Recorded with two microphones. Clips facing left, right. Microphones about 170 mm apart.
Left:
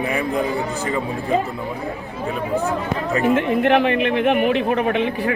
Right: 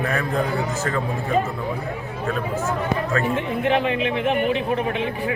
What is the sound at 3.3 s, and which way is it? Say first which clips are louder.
A man's voice: left 5 dB; 70° left (ahead or behind).